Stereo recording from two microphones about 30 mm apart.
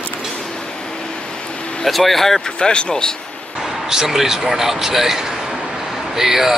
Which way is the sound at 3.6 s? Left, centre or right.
Centre.